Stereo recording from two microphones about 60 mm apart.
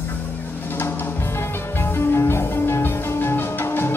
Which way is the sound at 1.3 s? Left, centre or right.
Left.